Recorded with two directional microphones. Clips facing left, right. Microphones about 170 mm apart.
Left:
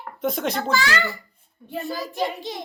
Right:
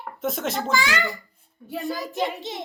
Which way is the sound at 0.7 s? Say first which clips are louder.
Left 1 dB; 15° right (ahead or behind).